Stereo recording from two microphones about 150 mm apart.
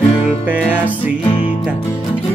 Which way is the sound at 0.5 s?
10° right (ahead or behind).